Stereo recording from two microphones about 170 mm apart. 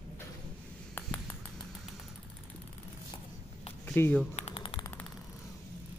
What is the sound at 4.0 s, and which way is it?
Speech, 10° left (ahead or behind).